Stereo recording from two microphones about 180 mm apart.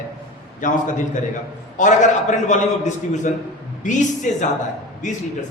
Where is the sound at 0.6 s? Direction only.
45° left (ahead or behind).